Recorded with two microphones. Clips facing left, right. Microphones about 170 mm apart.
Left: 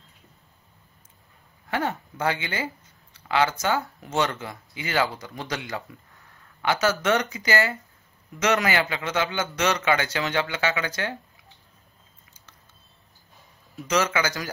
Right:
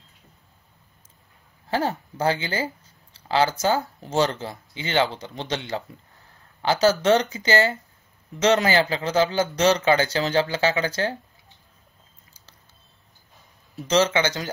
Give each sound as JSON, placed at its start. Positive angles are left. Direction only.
{"t": 1.7, "sound": "speech", "side_deg": -30}
{"t": 13.7, "sound": "speech", "side_deg": -30}